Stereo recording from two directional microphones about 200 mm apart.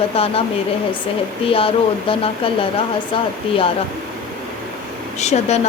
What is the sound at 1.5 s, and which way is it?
Speech, 30° left (ahead or behind).